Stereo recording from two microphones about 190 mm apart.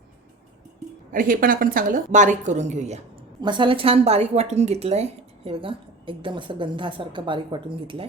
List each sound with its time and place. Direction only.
1.1 s a woman's voice: 45° right (ahead or behind)
3.4 s a woman's voice: 25° right (ahead or behind)